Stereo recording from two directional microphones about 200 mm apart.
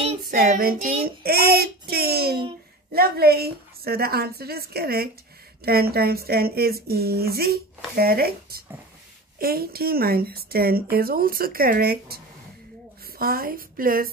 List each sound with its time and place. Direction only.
0.3 s child singing: 45° right (ahead or behind)
2.9 s speech: 50° right (ahead or behind)
13.2 s speech: 50° right (ahead or behind)